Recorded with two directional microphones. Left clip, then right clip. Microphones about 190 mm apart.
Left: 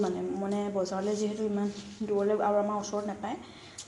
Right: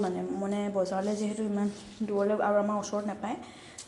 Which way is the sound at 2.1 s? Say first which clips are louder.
Even; 10° right (ahead or behind).